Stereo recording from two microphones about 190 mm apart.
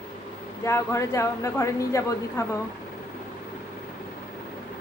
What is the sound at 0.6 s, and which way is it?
Speech, 15° left (ahead or behind).